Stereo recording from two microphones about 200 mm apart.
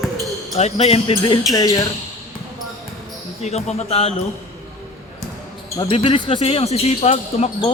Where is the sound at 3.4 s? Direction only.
30° left (ahead or behind).